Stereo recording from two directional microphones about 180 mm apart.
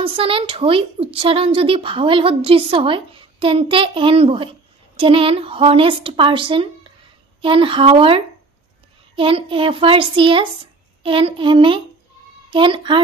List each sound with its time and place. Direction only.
0.0 s a woman's voice: 30° right (ahead or behind)